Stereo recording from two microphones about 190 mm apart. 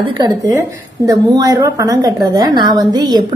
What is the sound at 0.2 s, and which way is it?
A woman's voice, 20° right (ahead or behind).